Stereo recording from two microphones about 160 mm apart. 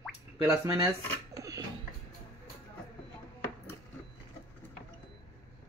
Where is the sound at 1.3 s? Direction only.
20° right (ahead or behind).